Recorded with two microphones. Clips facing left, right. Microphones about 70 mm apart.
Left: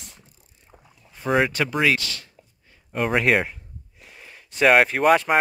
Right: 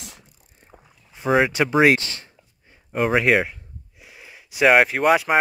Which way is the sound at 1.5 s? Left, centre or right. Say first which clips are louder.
Right 4 dB; centre.